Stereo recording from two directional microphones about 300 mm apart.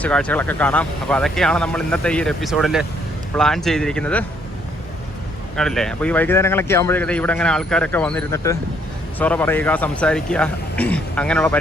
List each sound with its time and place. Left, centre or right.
0.0 s speech: centre
5.5 s speech: centre